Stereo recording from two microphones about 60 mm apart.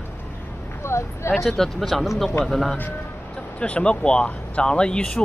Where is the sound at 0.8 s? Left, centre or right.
Left.